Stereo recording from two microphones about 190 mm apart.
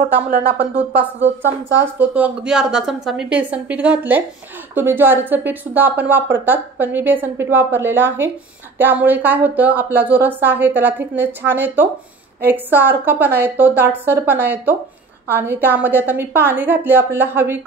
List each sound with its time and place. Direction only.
0.6 s speech: 60° right (ahead or behind)
1.8 s speech: 10° right (ahead or behind)